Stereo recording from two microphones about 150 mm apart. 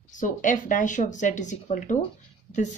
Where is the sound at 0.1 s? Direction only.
60° left (ahead or behind).